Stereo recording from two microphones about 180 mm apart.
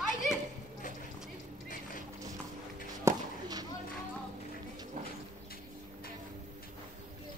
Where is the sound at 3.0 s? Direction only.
20° right (ahead or behind).